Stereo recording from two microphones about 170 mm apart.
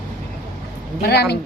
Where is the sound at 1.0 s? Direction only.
75° left (ahead or behind).